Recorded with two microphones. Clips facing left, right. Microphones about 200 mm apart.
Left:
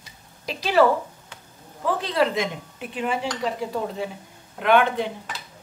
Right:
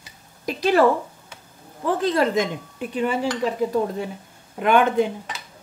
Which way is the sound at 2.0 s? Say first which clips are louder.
Right 3 dB; 45° right (ahead or behind).